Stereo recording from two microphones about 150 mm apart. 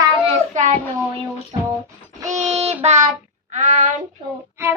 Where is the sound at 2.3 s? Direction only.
50° right (ahead or behind).